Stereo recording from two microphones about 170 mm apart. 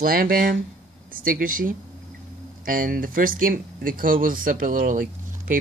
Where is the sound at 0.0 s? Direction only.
55° right (ahead or behind).